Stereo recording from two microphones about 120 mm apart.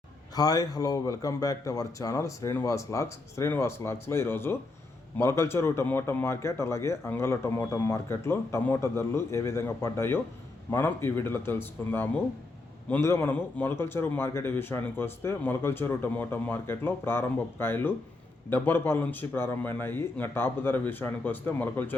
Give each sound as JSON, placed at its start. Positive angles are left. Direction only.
{"t": 0.3, "sound": "a man's voice", "side_deg": 30}